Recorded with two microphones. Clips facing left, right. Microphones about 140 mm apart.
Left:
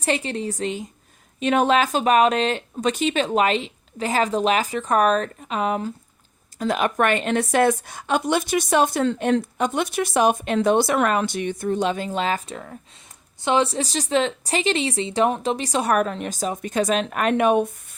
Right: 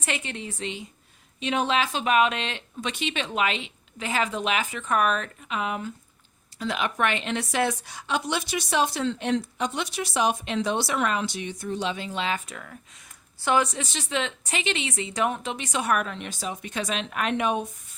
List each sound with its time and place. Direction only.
0.0 s a woman's voice: 35° left (ahead or behind)
12.5 s speech: 30° left (ahead or behind); by 17.9 s 55° left (ahead or behind)